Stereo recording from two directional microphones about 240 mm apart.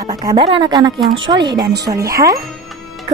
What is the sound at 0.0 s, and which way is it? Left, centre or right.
A woman's voice, centre.